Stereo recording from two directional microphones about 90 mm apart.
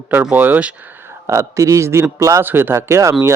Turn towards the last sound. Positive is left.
turn(degrees=-30)  # may be behind; listen again after turning